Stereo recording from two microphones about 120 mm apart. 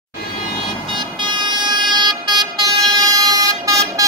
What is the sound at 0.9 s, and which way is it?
Vehicle, 40° right (ahead or behind).